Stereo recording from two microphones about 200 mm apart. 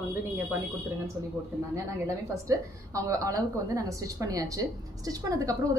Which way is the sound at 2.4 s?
15° right (ahead or behind).